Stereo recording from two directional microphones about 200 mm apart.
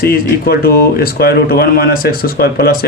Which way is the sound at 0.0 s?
50° left (ahead or behind).